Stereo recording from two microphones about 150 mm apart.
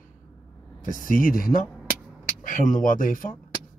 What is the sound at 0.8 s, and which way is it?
Speech, 65° left (ahead or behind).